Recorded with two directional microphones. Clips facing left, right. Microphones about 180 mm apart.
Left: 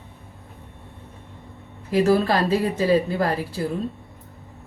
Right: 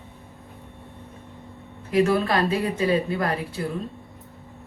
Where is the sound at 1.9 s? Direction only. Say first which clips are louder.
Left 2 dB; 35° left (ahead or behind).